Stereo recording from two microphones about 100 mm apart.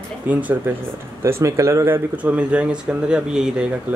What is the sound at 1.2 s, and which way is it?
Speech, 30° right (ahead or behind).